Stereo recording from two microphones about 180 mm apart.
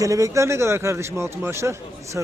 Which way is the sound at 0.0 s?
20° right (ahead or behind).